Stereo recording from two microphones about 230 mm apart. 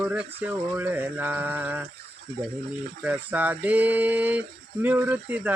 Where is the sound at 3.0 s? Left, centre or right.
Centre.